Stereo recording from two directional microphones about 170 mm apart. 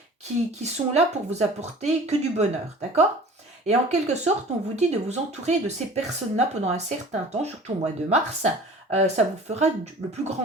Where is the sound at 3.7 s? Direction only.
40° right (ahead or behind).